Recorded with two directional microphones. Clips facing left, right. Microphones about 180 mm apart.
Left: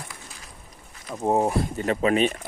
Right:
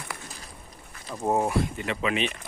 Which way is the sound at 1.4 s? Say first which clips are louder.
Left 3 dB; 40° left (ahead or behind).